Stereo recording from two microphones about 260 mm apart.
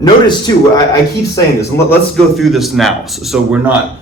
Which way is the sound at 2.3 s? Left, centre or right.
Centre.